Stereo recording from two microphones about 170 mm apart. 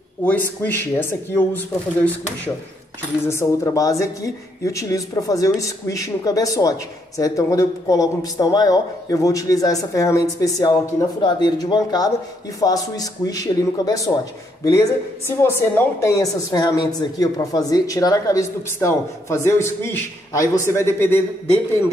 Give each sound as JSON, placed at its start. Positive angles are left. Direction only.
{"t": 0.2, "sound": "speech", "side_deg": 10}
{"t": 3.3, "sound": "speech", "side_deg": 20}